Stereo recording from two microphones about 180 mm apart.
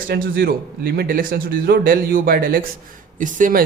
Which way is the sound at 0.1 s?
55° right (ahead or behind).